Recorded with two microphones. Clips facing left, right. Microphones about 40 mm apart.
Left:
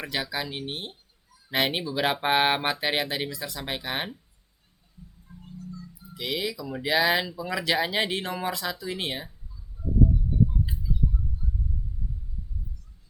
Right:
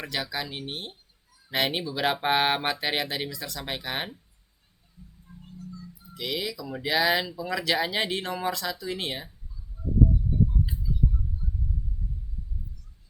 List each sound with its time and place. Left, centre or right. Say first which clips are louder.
0.0 s speech: left 1 dB; centre
5.3 s music: even; left
6.1 s speech: left 1 dB; centre